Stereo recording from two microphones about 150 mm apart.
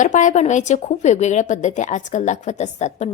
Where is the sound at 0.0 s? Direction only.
55° left (ahead or behind).